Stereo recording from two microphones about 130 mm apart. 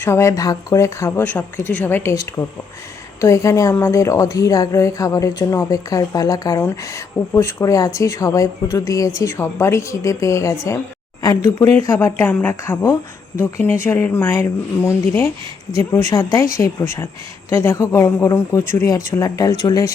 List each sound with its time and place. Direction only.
0.0 s a woman's voice: 20° left (ahead or behind)
15.7 s a woman's voice: 25° left (ahead or behind)